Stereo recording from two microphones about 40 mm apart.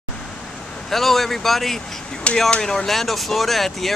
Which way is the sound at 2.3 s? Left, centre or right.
Left.